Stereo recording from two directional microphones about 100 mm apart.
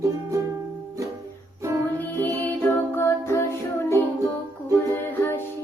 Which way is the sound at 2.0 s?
20° left (ahead or behind).